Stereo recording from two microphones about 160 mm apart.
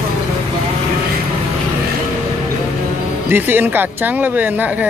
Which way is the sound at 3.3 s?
15° right (ahead or behind).